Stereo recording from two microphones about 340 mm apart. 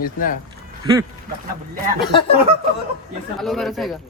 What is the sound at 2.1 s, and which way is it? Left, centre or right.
Speech, centre.